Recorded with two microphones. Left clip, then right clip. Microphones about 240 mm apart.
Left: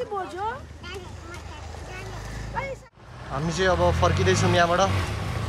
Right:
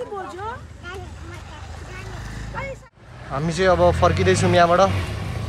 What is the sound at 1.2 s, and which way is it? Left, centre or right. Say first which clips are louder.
Speech: right 1 dB; left.